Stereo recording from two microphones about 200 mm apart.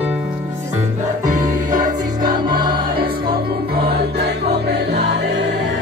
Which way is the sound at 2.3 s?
20° right (ahead or behind).